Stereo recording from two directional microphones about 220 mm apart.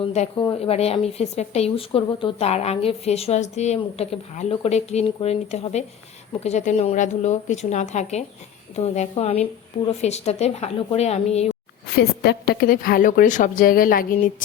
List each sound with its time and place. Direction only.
0.0 s a woman's voice: 25° left (ahead or behind)
12.2 s a woman's voice: 45° left (ahead or behind)